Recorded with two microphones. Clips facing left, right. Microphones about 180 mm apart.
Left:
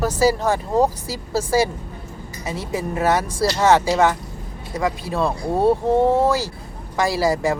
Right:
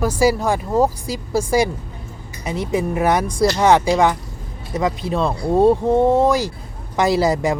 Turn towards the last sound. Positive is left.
turn(degrees=-20)  # may be behind; listen again after turning